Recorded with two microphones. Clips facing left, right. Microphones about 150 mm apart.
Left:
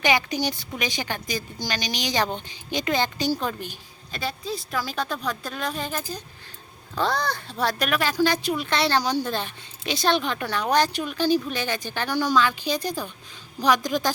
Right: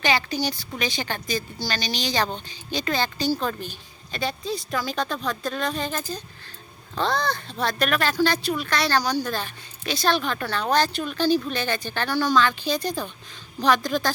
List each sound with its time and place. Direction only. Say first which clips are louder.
0.0 s speech: left 1 dB; 20° left (ahead or behind)
4.1 s speech: right 2 dB; 5° left (ahead or behind)